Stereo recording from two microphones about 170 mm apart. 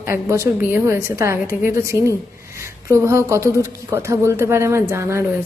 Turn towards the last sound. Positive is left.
turn(degrees=-15)  # may be behind; listen again after turning